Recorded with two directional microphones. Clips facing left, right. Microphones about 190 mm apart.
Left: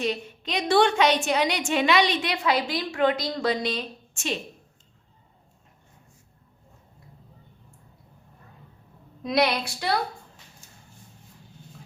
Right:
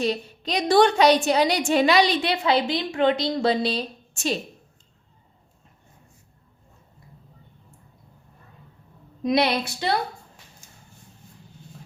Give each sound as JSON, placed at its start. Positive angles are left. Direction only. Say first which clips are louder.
{"t": 0.0, "sound": "a woman's voice", "louder": "right 3 dB", "side_deg": -35}
{"t": 9.2, "sound": "speech", "louder": "right 2 dB", "side_deg": -25}